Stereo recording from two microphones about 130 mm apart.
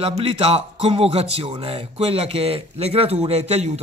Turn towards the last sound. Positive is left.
turn(degrees=-55)  # may be behind; listen again after turning